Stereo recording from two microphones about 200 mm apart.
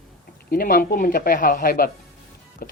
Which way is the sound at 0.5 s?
45° left (ahead or behind).